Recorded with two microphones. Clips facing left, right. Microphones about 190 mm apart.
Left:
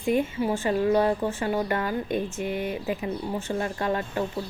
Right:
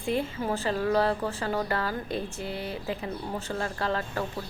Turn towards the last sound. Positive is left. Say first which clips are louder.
# left 3 dB
turn(degrees=15)  # may be behind; listen again after turning